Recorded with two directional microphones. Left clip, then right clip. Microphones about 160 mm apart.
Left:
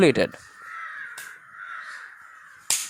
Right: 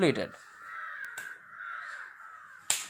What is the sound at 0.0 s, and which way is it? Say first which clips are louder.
Speech: left 9 dB; 45° left (ahead or behind).